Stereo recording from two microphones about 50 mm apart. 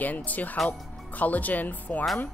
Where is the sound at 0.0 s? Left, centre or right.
Left.